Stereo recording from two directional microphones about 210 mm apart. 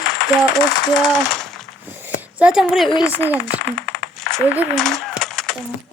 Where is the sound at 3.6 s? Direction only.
60° left (ahead or behind).